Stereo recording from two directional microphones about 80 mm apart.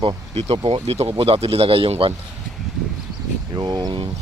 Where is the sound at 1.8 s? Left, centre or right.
Right.